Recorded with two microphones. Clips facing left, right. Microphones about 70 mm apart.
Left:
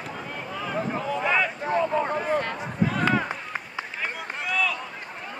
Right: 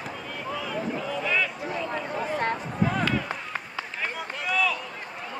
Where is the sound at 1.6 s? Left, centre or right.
Left.